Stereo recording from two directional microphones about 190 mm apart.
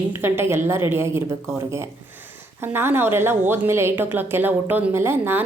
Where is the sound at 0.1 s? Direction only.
10° right (ahead or behind).